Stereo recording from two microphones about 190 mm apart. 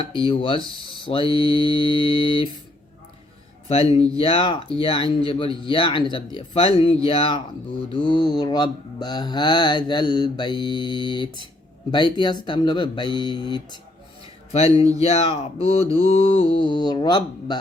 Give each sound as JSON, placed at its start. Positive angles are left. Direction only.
{"t": 0.0, "sound": "mantra", "side_deg": 25}
{"t": 3.7, "sound": "speech", "side_deg": 30}
{"t": 4.2, "sound": "mantra", "side_deg": 30}
{"t": 14.5, "sound": "mantra", "side_deg": 35}